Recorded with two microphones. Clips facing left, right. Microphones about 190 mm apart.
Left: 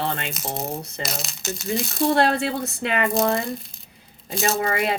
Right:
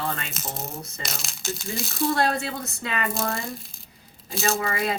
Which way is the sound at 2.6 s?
30° left (ahead or behind).